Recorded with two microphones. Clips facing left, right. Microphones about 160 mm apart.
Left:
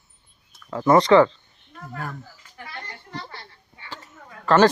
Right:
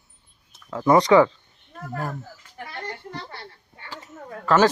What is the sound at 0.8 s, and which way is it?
Speech, 10° right (ahead or behind).